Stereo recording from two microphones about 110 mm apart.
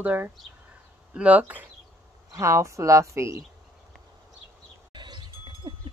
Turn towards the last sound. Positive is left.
turn(degrees=-45)  # may be behind; listen again after turning